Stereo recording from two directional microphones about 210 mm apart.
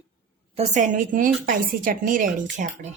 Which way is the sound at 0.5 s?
35° right (ahead or behind).